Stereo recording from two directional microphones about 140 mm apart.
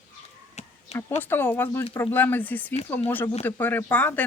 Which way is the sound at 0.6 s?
55° left (ahead or behind).